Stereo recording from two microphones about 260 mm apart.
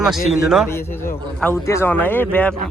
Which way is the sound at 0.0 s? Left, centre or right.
Centre.